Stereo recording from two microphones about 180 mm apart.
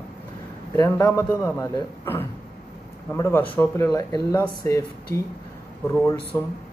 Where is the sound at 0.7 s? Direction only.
15° left (ahead or behind).